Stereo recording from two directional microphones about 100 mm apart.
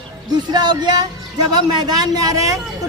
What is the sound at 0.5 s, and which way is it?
Speech, 45° right (ahead or behind).